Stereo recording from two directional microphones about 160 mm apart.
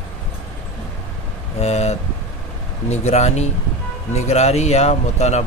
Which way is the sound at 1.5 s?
40° left (ahead or behind).